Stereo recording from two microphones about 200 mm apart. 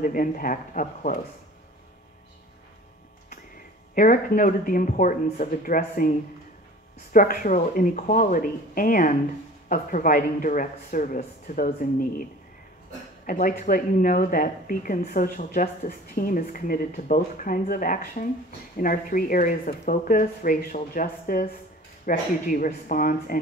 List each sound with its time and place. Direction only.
0.0 s speech: 45° left (ahead or behind)
3.9 s speech: 45° left (ahead or behind)
13.3 s speech: 45° left (ahead or behind)